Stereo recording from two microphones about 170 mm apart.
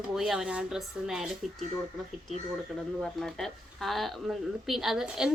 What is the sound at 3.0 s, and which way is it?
A woman's voice, centre (ahead or behind).